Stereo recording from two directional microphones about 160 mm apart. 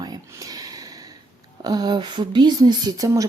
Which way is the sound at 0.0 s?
25° right (ahead or behind).